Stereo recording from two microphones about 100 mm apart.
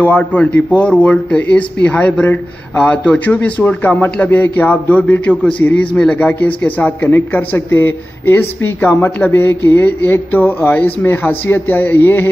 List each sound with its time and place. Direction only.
0.0 s speech: 15° left (ahead or behind)